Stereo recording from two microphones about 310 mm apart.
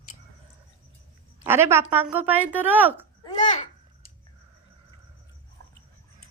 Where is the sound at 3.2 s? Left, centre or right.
Left.